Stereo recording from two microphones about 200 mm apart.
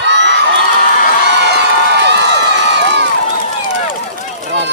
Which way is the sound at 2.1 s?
60° right (ahead or behind).